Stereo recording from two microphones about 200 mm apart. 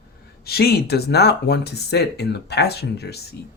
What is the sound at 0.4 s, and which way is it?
Speech, 50° left (ahead or behind).